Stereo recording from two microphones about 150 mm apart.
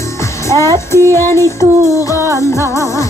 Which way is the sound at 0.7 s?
20° right (ahead or behind).